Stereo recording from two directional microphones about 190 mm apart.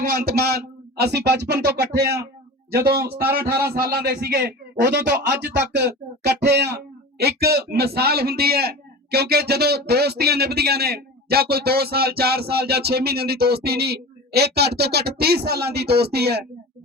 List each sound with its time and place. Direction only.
0.0 s a man's voice: 55° right (ahead or behind)